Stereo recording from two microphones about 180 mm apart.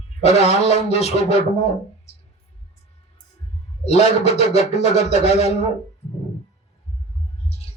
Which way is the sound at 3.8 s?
35° left (ahead or behind).